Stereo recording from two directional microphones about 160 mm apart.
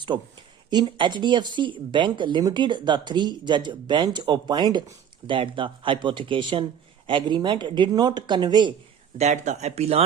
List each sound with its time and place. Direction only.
0.1 s speech: 25° right (ahead or behind)
9.1 s speech: 45° right (ahead or behind)